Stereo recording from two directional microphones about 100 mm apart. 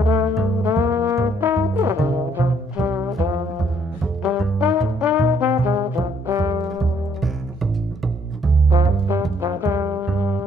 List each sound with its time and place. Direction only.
0.0 s music: 15° right (ahead or behind)
0.6 s brass instrument: 20° right (ahead or behind)
4.0 s music: 5° right (ahead or behind)
5.5 s trombone: 25° right (ahead or behind)
6.4 s music: 40° right (ahead or behind)
6.7 s music: centre (ahead or behind)
8.6 s music: 30° right (ahead or behind)
9.4 s brass instrument: 30° right (ahead or behind)
10.0 s music: 25° right (ahead or behind)